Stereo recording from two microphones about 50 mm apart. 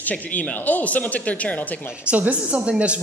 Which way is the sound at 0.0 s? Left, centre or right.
Left.